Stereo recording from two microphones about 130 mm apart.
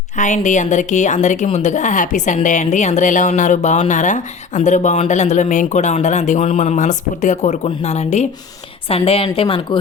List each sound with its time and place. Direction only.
0.2 s a woman's voice: 70° left (ahead or behind)
8.9 s a woman's voice: 50° left (ahead or behind)